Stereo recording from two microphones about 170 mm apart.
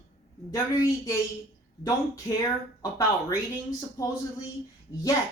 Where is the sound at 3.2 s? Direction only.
20° left (ahead or behind).